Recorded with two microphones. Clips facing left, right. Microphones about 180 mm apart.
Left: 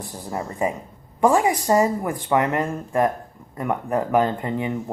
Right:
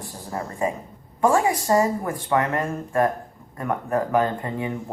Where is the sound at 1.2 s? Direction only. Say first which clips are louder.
Left 2 dB; 20° left (ahead or behind).